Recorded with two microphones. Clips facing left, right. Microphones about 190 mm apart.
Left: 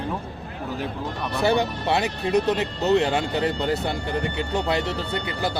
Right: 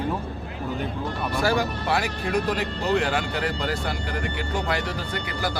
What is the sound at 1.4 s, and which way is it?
Speech, 25° left (ahead or behind).